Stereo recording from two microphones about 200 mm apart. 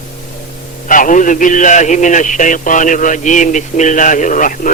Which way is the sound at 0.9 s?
40° left (ahead or behind).